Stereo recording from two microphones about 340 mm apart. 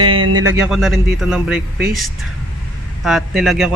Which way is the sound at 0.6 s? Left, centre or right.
Centre.